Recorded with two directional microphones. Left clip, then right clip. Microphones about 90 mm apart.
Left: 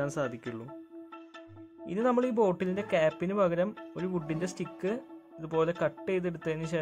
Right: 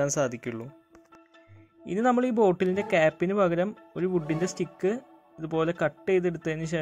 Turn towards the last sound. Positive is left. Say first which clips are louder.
# right 2 dB
turn(degrees=-25)  # may be behind; listen again after turning